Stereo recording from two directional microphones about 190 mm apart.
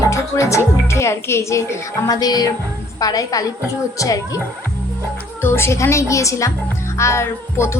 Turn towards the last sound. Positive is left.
turn(degrees=15)  # may be behind; listen again after turning